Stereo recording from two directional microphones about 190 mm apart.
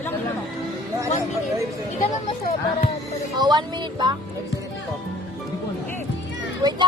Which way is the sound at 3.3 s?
20° right (ahead or behind).